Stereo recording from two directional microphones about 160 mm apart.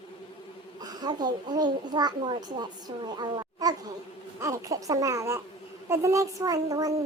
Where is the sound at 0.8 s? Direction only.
25° right (ahead or behind).